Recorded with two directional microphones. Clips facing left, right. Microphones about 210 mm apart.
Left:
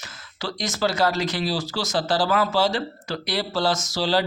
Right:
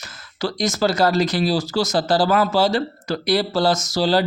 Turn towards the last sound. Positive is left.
turn(degrees=-40)  # may be behind; listen again after turning